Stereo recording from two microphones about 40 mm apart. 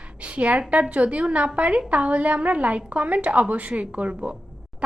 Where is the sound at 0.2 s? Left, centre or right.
Right.